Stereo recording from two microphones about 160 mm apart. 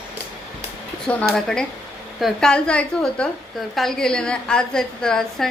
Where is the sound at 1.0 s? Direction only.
Centre (ahead or behind).